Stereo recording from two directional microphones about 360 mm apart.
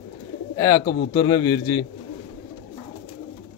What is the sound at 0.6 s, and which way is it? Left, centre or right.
Speech, centre.